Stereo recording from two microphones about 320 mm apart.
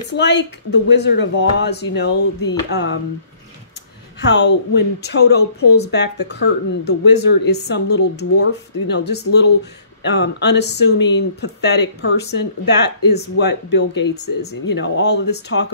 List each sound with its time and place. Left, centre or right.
0.1 s speech: left
4.2 s speech: left
14.1 s speech: left
14.8 s speech: left